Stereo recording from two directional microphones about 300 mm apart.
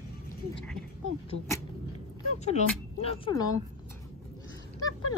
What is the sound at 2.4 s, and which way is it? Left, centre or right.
Speech, left.